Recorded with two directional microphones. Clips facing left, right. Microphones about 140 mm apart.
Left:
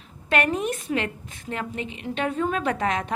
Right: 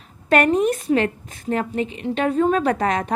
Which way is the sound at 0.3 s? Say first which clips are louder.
Right 7 dB; 35° right (ahead or behind).